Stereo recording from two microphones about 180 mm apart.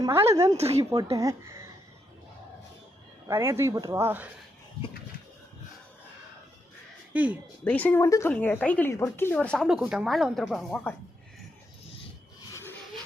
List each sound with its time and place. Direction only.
0.3 s speech: 15° right (ahead or behind)
0.5 s speech: 35° right (ahead or behind)
1.1 s speech: 20° right (ahead or behind)
3.2 s speech: 15° right (ahead or behind)
7.1 s speech: 10° right (ahead or behind)
7.6 s speech: 10° left (ahead or behind)